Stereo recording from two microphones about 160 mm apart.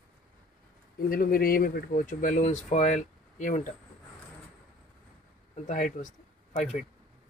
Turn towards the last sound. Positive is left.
turn(degrees=45)  # may be behind; listen again after turning